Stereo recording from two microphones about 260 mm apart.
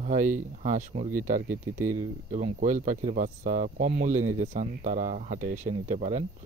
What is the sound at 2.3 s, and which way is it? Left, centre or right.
Speech, right.